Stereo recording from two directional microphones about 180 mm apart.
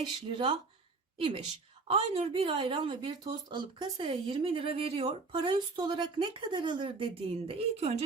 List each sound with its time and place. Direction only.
0.0 s speech: 30° right (ahead or behind)
1.9 s speech: 35° right (ahead or behind)